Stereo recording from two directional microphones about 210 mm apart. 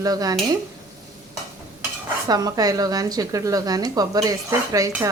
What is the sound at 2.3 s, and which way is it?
A woman's voice, 15° right (ahead or behind).